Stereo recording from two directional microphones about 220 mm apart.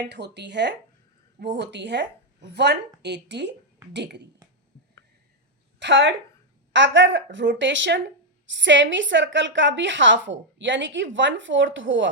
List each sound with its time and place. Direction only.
0.0 s speech: 50° right (ahead or behind)
5.8 s a woman's voice: 55° right (ahead or behind)